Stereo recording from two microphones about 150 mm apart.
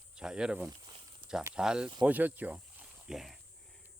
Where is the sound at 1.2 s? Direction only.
35° right (ahead or behind).